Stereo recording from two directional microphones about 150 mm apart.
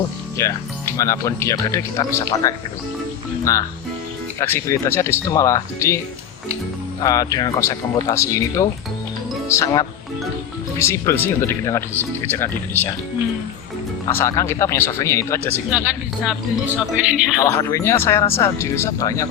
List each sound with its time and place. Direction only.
0.3 s speech: 20° left (ahead or behind)
7.0 s speech: 20° left (ahead or behind)
14.1 s speech: 20° left (ahead or behind)
15.7 s speech: 5° right (ahead or behind)
17.4 s speech: 20° left (ahead or behind)